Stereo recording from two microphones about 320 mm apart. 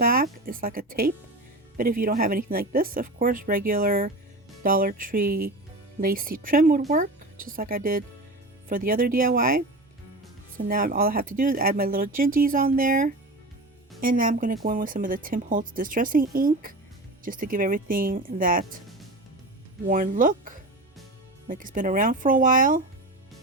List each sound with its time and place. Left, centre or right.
0.0 s a sound: right
1.7 s speech: right
19.9 s speech: right